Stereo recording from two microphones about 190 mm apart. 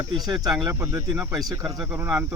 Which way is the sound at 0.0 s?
20° right (ahead or behind).